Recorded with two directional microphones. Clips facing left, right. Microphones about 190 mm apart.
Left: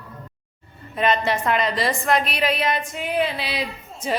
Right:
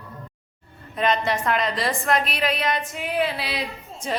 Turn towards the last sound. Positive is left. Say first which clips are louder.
# left 2 dB
turn(degrees=0)  # may be behind; listen again after turning